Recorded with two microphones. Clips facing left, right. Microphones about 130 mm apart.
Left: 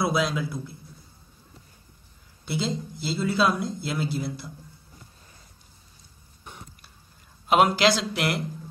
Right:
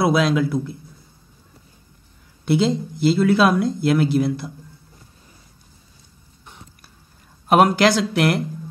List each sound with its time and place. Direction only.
0.0 s a man's voice: 75° right (ahead or behind)
2.4 s speech: 65° right (ahead or behind)
7.4 s speech: 50° right (ahead or behind)